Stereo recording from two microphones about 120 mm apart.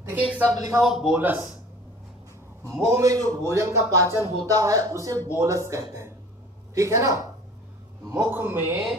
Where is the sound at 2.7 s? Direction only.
25° right (ahead or behind).